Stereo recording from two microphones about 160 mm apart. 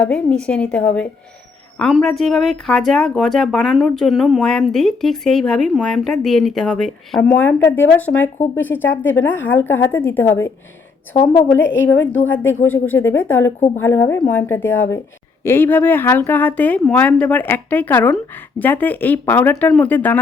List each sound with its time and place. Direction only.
0.0 s speech: 5° left (ahead or behind)
11.2 s a woman's voice: 30° left (ahead or behind)
11.5 s speech: 15° left (ahead or behind)